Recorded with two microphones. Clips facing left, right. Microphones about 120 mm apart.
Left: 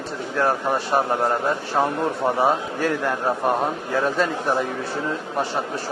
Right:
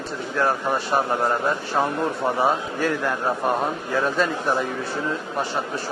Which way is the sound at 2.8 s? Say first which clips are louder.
Left 1 dB; 40° left (ahead or behind).